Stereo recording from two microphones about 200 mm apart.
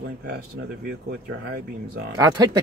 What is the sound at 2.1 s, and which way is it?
Speech, 20° right (ahead or behind).